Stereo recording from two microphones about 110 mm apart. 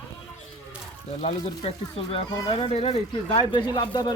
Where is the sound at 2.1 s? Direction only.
60° left (ahead or behind).